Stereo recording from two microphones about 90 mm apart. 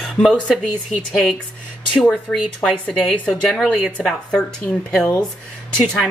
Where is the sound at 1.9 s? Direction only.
15° left (ahead or behind).